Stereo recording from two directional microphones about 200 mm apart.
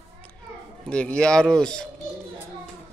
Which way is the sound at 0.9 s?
5° left (ahead or behind).